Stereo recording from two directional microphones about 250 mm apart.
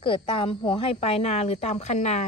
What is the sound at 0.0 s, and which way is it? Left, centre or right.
Speech, left.